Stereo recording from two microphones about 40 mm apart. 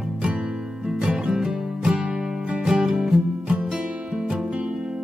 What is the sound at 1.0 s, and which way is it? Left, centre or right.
Music, right.